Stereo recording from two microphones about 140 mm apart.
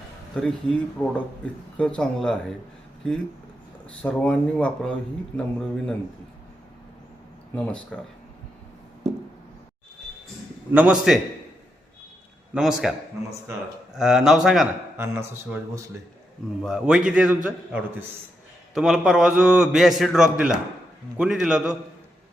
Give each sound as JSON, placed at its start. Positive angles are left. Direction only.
{"t": 0.3, "sound": "a man's voice", "side_deg": 5}
{"t": 4.0, "sound": "a man's voice", "side_deg": 10}
{"t": 7.5, "sound": "speech", "side_deg": 10}
{"t": 10.7, "sound": "a man's voice", "side_deg": -10}
{"t": 12.5, "sound": "a man's voice", "side_deg": -5}
{"t": 13.9, "sound": "a man's voice", "side_deg": -5}
{"t": 14.9, "sound": "a man's voice", "side_deg": -15}
{"t": 16.6, "sound": "a man's voice", "side_deg": -5}